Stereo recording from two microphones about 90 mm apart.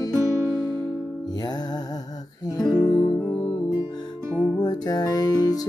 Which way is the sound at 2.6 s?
5° left (ahead or behind).